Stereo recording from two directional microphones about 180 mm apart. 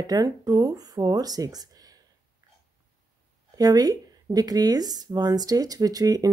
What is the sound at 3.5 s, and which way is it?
Speech, 20° right (ahead or behind).